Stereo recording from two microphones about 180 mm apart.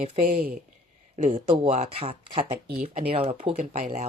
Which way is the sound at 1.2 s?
40° right (ahead or behind).